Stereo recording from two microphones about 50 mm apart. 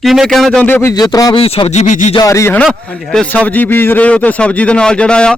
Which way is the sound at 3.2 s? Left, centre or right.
Left.